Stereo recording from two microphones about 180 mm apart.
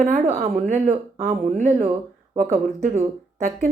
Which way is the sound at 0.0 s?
40° right (ahead or behind).